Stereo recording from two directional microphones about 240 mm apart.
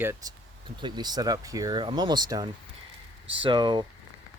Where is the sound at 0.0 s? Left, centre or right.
Centre.